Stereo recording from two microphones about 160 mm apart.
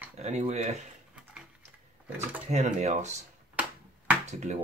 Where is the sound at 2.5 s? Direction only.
50° right (ahead or behind).